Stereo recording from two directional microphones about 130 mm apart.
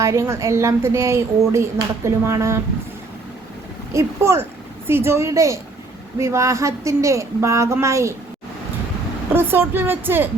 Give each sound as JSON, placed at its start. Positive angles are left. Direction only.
{"t": 0.0, "sound": "speech", "side_deg": -25}
{"t": 3.9, "sound": "speech", "side_deg": -20}
{"t": 9.3, "sound": "a woman's voice", "side_deg": -15}